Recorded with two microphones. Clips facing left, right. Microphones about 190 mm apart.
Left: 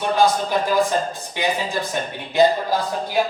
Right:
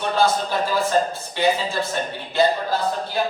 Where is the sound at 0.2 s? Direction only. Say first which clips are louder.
Left 1 dB; 15° left (ahead or behind).